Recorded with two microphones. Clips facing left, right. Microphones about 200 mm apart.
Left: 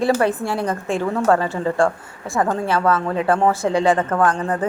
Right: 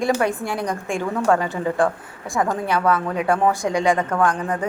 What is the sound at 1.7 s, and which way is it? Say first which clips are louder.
Speech: left 2 dB; centre (ahead or behind).